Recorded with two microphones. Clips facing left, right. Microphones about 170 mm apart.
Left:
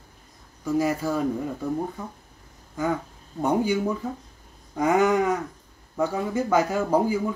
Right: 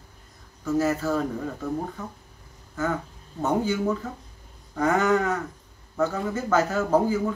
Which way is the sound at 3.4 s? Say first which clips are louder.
Left 1 dB; 15° left (ahead or behind).